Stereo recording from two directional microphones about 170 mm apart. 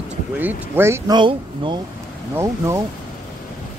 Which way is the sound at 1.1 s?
25° right (ahead or behind).